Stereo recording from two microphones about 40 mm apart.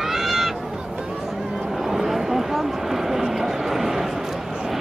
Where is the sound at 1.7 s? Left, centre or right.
Centre.